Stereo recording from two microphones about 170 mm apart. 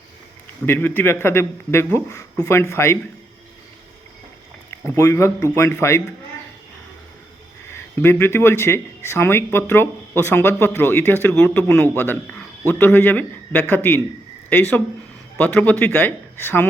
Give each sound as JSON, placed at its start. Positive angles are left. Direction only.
{"t": 0.6, "sound": "speech", "side_deg": 10}
{"t": 4.9, "sound": "speech", "side_deg": 15}
{"t": 7.7, "sound": "speech", "side_deg": 15}